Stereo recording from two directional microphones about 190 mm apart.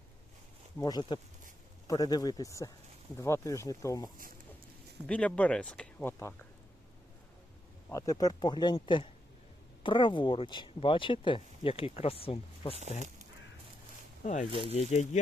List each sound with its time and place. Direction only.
0.8 s speech: 20° left (ahead or behind)
5.0 s speech: 5° left (ahead or behind)
7.9 s speech: 15° left (ahead or behind)
14.6 s speech: 35° left (ahead or behind)